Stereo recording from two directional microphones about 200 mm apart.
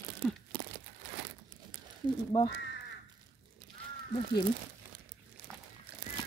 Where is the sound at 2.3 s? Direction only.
25° left (ahead or behind).